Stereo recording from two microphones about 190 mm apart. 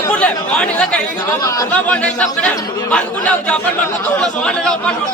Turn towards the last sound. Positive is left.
turn(degrees=5)  # may be behind; listen again after turning